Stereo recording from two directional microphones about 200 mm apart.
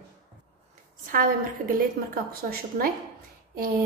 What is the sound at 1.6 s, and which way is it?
Speech, 40° right (ahead or behind).